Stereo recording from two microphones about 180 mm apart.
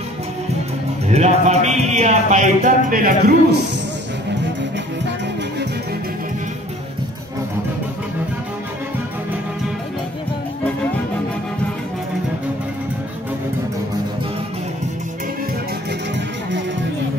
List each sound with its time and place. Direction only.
1.0 s speech: 40° right (ahead or behind)